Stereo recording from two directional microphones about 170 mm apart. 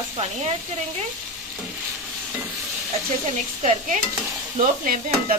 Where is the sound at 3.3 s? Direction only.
50° right (ahead or behind).